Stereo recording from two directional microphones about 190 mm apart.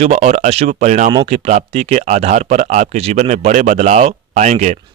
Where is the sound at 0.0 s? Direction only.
35° right (ahead or behind).